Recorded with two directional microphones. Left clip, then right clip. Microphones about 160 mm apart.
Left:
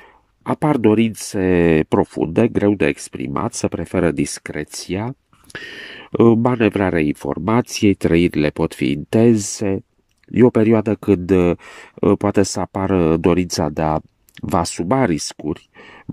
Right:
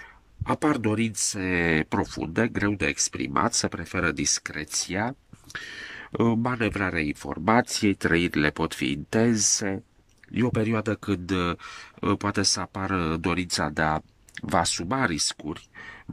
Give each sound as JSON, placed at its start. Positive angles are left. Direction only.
{"t": 0.4, "sound": "speech", "side_deg": 60}
{"t": 1.5, "sound": "speech", "side_deg": 35}
{"t": 2.7, "sound": "speech", "side_deg": 55}
{"t": 3.3, "sound": "speech", "side_deg": 20}
{"t": 3.8, "sound": "speech", "side_deg": 50}
{"t": 5.5, "sound": "a sound", "side_deg": 40}
{"t": 5.9, "sound": "a sound", "side_deg": 25}
{"t": 6.6, "sound": "speech", "side_deg": 50}
{"t": 7.4, "sound": "speech", "side_deg": 15}
{"t": 7.9, "sound": "speech", "side_deg": 25}
{"t": 10.3, "sound": "speech", "side_deg": 55}
{"t": 14.6, "sound": "speech", "side_deg": 45}